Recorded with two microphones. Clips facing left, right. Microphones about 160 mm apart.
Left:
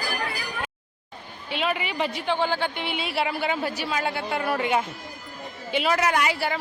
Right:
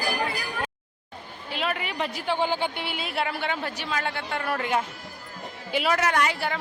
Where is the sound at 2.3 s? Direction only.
15° right (ahead or behind).